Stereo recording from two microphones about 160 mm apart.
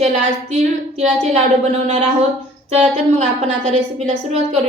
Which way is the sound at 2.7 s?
40° right (ahead or behind).